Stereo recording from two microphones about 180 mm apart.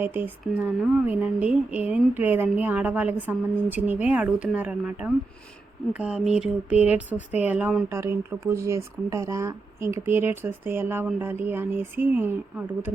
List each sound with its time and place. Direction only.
0.0 s speech: 10° right (ahead or behind)
6.3 s a sound: 5° right (ahead or behind)
6.8 s speech: 10° right (ahead or behind)